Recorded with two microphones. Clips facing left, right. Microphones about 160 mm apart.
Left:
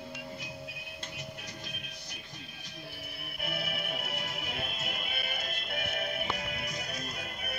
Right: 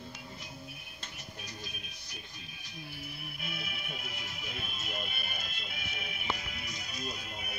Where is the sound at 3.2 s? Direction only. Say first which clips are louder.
Left 9 dB; 65° left (ahead or behind).